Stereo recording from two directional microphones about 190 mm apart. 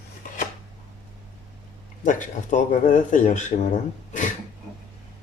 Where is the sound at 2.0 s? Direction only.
40° left (ahead or behind).